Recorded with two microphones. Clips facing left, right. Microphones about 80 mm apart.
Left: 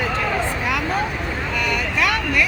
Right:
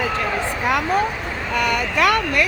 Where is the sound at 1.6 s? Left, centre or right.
Right.